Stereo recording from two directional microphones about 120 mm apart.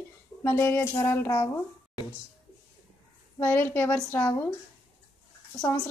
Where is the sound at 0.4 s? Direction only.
20° left (ahead or behind).